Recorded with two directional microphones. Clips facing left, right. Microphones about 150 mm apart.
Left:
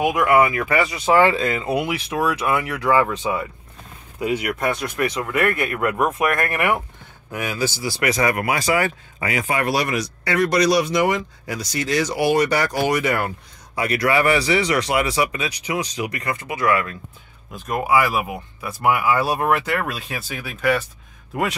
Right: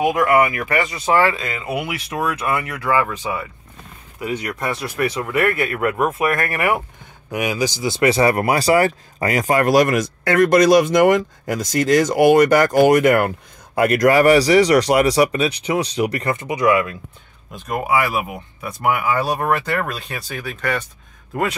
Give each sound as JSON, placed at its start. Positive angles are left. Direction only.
{"t": 0.0, "sound": "speech", "side_deg": 5}
{"t": 0.3, "sound": "speech", "side_deg": 20}
{"t": 4.3, "sound": "speech", "side_deg": 10}
{"t": 7.2, "sound": "speech", "side_deg": -15}
{"t": 17.6, "sound": "speech", "side_deg": 0}